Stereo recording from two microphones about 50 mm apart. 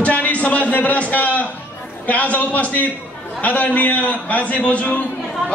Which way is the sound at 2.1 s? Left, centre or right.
Left.